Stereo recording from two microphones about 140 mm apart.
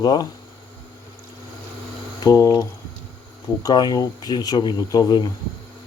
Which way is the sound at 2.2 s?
25° left (ahead or behind).